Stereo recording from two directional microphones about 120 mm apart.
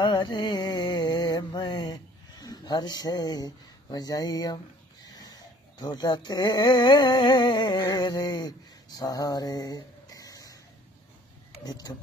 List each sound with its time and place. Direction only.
0.0 s mantra: 40° left (ahead or behind)
5.8 s a sound: 35° left (ahead or behind)
11.6 s speech: 35° left (ahead or behind)